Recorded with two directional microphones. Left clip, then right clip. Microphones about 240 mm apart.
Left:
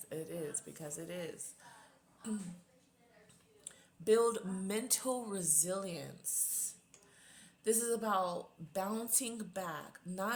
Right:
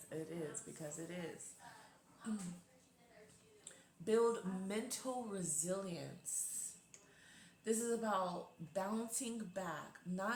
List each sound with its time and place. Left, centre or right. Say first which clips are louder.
0.1 s speech: left 4 dB; left
4.0 s speech: left 5 dB; left
7.3 s speech: left 5 dB; left